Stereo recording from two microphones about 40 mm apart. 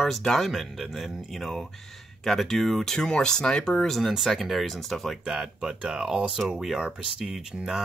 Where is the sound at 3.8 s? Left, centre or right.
Centre.